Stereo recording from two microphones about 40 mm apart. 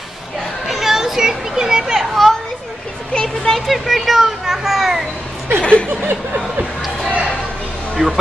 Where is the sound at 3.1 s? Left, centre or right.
Centre.